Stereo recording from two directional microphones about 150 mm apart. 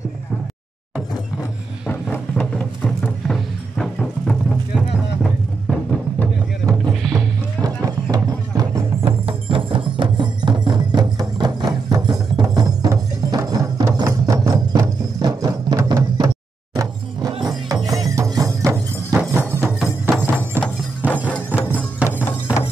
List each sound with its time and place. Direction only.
1.9 s music: 10° left (ahead or behind)
7.6 s music: 25° right (ahead or behind)
9.0 s music: 35° right (ahead or behind); by 20.7 s 15° right (ahead or behind)
22.0 s music: 15° left (ahead or behind)